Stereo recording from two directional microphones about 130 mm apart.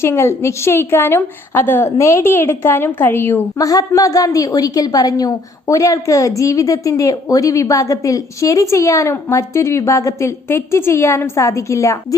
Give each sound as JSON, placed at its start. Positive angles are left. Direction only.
{"t": 0.0, "sound": "a woman's voice", "side_deg": 20}